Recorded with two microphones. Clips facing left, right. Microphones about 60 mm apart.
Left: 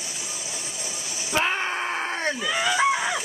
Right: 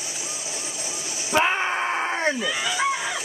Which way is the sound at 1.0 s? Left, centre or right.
Centre.